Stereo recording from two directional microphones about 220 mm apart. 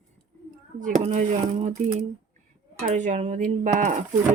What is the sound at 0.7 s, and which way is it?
Speech, 35° right (ahead or behind).